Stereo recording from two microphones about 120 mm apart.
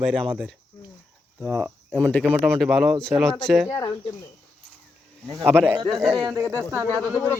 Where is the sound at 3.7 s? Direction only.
30° left (ahead or behind).